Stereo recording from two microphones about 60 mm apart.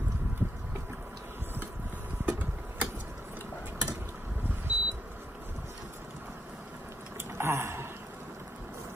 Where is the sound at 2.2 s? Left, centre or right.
Right.